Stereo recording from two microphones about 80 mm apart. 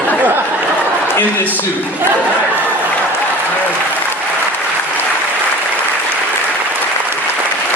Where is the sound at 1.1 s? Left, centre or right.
Left.